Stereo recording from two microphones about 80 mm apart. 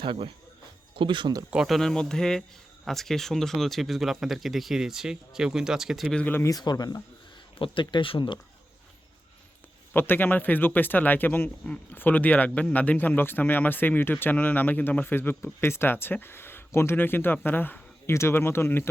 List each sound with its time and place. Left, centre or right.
0.0 s speech: right
1.6 s speech: centre
6.1 s speech: left
6.6 s speech: left
7.6 s speech: left
9.9 s speech: left